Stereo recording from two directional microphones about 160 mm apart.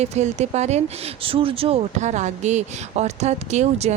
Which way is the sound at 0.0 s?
45° right (ahead or behind).